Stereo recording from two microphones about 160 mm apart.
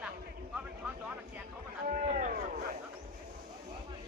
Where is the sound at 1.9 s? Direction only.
55° right (ahead or behind).